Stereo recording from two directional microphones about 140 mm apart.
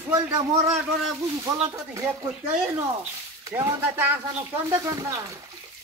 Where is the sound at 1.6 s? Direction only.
25° right (ahead or behind).